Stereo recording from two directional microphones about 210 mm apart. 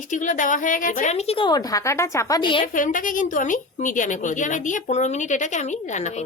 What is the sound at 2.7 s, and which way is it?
Speech, 40° left (ahead or behind).